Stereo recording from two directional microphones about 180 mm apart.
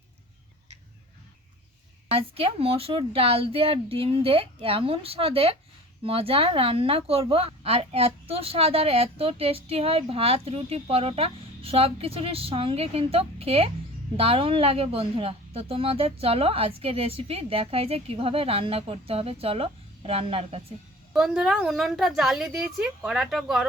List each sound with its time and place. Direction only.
2.0 s a woman's voice: 30° right (ahead or behind)
21.1 s a woman's voice: 5° right (ahead or behind)